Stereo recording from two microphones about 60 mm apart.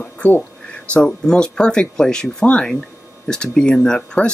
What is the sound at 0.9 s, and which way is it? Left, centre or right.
Speech, centre.